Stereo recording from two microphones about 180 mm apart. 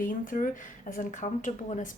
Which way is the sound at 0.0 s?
50° left (ahead or behind).